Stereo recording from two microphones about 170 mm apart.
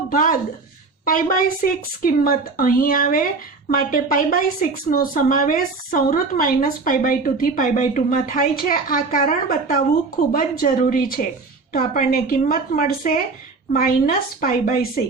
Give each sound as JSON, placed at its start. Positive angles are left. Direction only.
{"t": 0.1, "sound": "a woman's voice", "side_deg": 55}